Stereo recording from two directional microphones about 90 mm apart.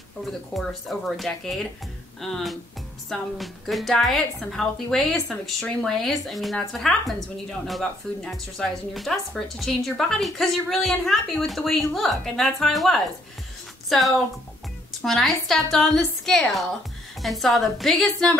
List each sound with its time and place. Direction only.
0.2 s a woman's voice: centre (ahead or behind)